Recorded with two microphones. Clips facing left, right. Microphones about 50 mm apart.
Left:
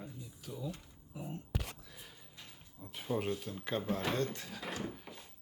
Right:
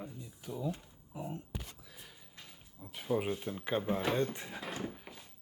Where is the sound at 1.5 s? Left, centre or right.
Left.